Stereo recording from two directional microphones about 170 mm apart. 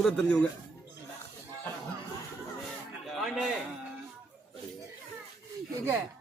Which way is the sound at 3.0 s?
Centre (ahead or behind).